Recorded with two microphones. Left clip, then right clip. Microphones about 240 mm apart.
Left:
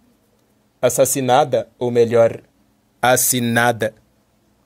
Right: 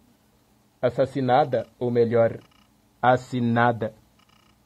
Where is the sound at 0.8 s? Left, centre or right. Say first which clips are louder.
Left 7 dB; left.